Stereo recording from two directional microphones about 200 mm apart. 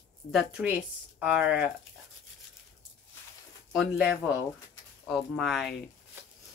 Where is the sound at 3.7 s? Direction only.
Centre (ahead or behind).